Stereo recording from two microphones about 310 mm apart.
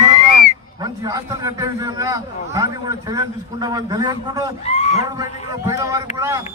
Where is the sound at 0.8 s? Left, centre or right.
Centre.